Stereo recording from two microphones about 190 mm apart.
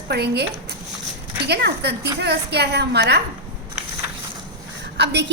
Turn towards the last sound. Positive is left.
turn(degrees=-65)  # may be behind; listen again after turning